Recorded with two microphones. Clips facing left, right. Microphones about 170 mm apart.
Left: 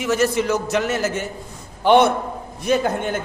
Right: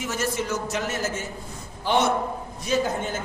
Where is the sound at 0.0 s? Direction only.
70° left (ahead or behind).